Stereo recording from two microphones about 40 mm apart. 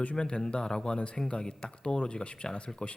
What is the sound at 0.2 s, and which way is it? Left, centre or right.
Speech, left.